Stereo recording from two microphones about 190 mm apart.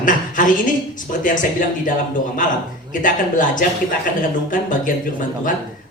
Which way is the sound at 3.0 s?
45° left (ahead or behind).